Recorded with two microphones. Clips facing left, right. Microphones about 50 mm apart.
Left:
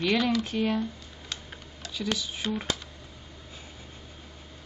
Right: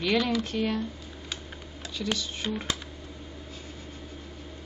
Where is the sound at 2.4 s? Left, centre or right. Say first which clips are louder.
Left 1 dB; centre.